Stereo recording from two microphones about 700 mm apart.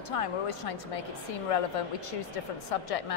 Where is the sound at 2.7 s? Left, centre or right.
Left.